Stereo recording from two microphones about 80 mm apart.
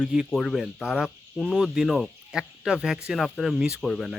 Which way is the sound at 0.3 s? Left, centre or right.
Centre.